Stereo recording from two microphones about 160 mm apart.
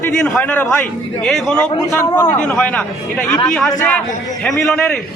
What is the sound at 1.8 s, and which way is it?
Speech, 25° left (ahead or behind).